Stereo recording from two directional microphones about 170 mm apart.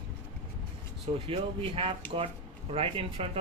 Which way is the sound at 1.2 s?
35° right (ahead or behind).